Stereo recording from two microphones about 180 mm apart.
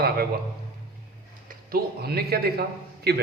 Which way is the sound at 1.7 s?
60° right (ahead or behind).